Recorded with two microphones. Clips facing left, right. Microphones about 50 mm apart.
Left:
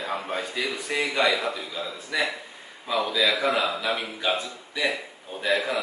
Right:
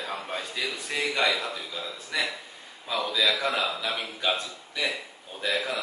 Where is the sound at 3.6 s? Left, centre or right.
Centre.